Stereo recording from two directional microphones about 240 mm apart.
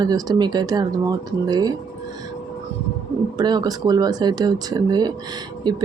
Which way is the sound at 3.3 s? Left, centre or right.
Centre.